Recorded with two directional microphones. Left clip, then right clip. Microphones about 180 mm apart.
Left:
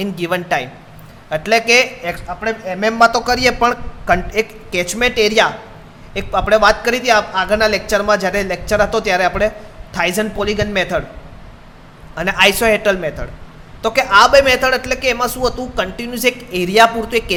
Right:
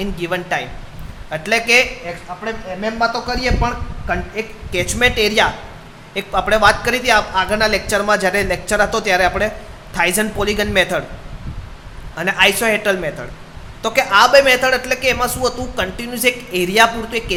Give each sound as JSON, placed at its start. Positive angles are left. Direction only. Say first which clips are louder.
{"t": 0.0, "sound": "a woman's voice", "louder": "left 2 dB", "side_deg": 25}
{"t": 2.0, "sound": "a man's voice", "louder": "left 5 dB", "side_deg": 45}
{"t": 4.7, "sound": "speech", "louder": "right 2 dB", "side_deg": 15}
{"t": 12.1, "sound": "a woman's voice", "louder": "left 1 dB", "side_deg": 20}